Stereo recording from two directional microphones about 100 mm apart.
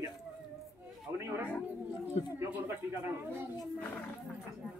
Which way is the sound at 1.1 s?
25° right (ahead or behind).